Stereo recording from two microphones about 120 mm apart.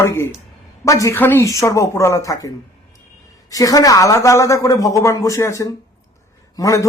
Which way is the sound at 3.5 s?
30° left (ahead or behind).